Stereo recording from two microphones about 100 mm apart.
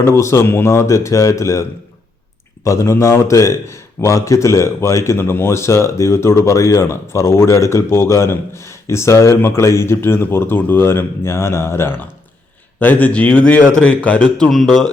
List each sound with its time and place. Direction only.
0.0 s a man's voice: 30° left (ahead or behind)
2.6 s a man's voice: 30° left (ahead or behind); by 14.8 s centre (ahead or behind)